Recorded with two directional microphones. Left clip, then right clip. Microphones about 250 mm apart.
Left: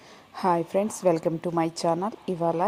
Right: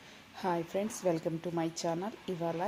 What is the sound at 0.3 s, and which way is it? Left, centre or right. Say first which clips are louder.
A woman's voice: left 10 dB; left.